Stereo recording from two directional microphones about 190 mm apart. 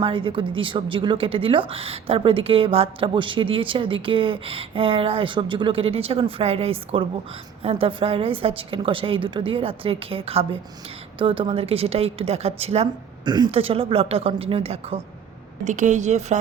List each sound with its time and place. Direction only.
0.0 s a woman's voice: 30° right (ahead or behind)